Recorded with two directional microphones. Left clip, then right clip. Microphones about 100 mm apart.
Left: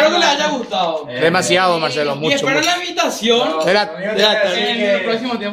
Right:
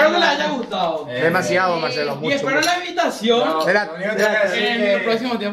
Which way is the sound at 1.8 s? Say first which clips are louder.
Left 4 dB; 25° left (ahead or behind).